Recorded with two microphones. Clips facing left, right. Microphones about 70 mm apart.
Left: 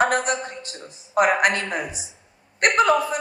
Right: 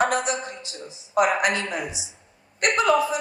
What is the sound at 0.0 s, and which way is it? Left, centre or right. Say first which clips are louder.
Speech: left 2 dB; left.